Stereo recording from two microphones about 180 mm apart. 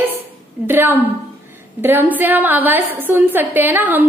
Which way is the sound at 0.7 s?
10° right (ahead or behind).